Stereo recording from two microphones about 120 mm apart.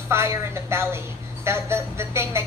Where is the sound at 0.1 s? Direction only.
20° right (ahead or behind).